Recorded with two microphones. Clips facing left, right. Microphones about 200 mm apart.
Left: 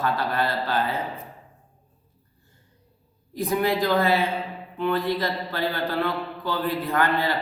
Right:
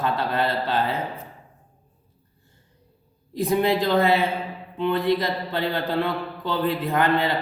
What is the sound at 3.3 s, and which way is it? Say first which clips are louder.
A man's voice: right 3 dB; 25° right (ahead or behind).